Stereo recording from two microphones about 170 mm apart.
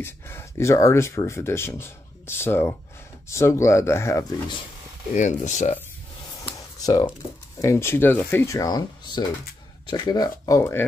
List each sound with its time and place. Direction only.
0.0 s speech: 15° left (ahead or behind)
5.1 s speech: 45° left (ahead or behind)
6.8 s speech: 25° left (ahead or behind)